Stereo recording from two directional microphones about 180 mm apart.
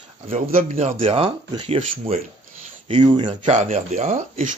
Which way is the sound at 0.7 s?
30° right (ahead or behind).